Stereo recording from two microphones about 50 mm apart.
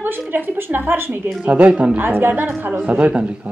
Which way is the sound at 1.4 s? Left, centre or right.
Right.